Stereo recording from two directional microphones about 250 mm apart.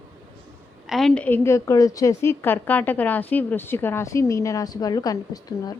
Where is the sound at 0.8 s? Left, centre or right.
Centre.